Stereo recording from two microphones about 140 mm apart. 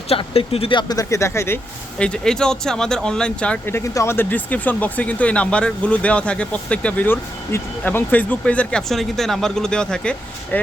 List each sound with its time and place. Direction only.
0.1 s speech: 45° left (ahead or behind); by 1.5 s 20° left (ahead or behind)
2.0 s speech: 5° left (ahead or behind)